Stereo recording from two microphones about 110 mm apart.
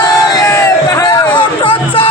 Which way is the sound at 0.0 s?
35° left (ahead or behind).